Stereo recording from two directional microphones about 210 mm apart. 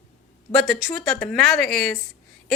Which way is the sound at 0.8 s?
5° left (ahead or behind).